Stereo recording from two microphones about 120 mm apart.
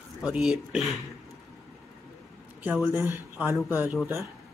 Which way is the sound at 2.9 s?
20° right (ahead or behind).